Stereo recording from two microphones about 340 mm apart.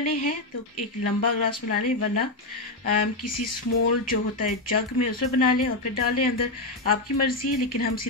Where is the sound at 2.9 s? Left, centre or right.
Left.